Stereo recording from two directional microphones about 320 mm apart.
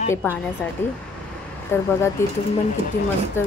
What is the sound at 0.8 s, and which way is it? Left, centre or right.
A woman's voice, centre.